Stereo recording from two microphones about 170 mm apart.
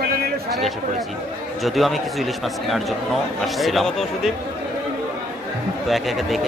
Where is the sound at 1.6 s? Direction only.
Centre (ahead or behind).